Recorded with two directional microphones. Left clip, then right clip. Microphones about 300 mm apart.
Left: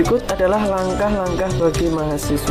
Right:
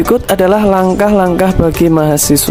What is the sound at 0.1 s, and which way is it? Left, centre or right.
Speech, right.